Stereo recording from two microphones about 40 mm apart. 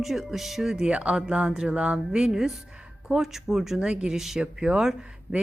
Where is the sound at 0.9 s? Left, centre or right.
Right.